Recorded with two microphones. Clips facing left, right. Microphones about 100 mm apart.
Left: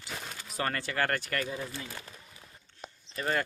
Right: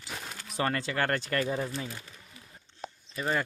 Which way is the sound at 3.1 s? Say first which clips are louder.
Right 1 dB; 10° right (ahead or behind).